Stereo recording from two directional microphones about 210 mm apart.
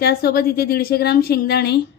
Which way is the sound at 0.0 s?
50° left (ahead or behind).